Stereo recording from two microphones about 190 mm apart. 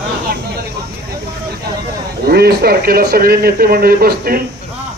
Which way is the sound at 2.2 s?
55° right (ahead or behind).